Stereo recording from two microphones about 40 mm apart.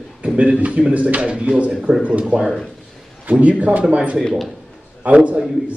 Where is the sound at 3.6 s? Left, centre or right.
Right.